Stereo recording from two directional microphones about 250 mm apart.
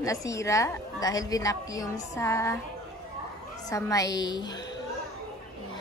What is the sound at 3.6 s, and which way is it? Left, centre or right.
Speech, centre.